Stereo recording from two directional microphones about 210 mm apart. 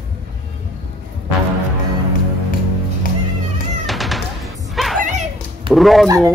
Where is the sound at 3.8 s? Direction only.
Centre (ahead or behind).